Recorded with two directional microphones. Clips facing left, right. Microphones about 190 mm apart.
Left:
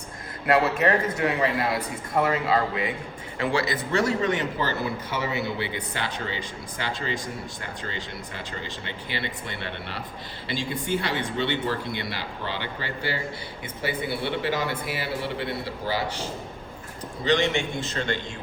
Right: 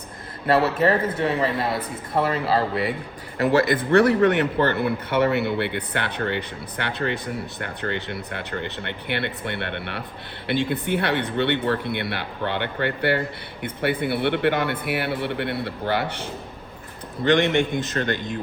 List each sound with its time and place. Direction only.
0.4 s a man's voice: 25° right (ahead or behind)
3.3 s speech: 45° right (ahead or behind)
3.9 s speech: 60° right (ahead or behind)
17.7 s speech: 25° left (ahead or behind)